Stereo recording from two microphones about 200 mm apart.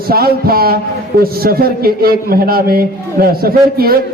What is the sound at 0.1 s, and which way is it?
A man's voice, 50° right (ahead or behind).